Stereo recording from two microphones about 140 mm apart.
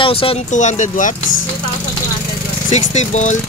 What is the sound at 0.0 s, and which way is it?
Speech, 40° left (ahead or behind).